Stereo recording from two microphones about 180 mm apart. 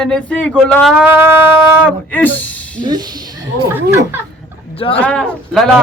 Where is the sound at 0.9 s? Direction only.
10° right (ahead or behind).